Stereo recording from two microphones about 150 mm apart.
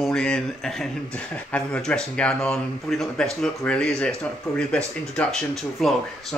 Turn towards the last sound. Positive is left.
turn(degrees=0)  # may be behind; listen again after turning